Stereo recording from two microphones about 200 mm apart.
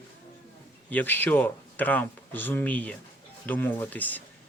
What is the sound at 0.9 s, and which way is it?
Speech, 10° left (ahead or behind).